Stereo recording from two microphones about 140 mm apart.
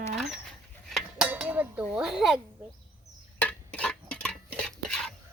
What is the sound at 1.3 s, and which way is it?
Dishes, 15° right (ahead or behind).